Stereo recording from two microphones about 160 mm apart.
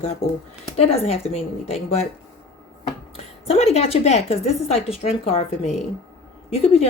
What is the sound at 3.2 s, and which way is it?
A woman's voice, 40° left (ahead or behind).